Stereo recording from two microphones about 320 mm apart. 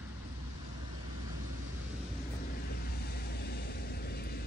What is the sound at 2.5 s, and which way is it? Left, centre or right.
Vehicle, left.